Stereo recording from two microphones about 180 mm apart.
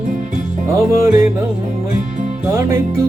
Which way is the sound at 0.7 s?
15° right (ahead or behind).